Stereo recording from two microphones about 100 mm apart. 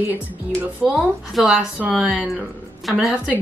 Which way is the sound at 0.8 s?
Centre (ahead or behind).